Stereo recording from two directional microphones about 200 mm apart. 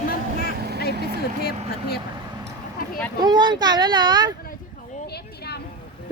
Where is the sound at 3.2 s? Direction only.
20° right (ahead or behind).